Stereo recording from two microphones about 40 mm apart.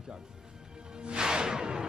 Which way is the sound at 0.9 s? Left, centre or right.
Right.